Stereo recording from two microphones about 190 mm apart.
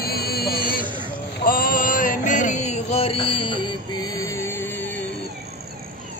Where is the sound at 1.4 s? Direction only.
50° left (ahead or behind); by 4.1 s 25° left (ahead or behind).